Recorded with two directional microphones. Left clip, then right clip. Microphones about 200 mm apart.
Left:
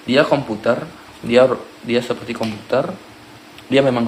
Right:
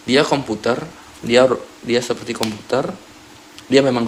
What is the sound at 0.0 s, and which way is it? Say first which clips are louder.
Speech: left 1 dB; 35° right (ahead or behind).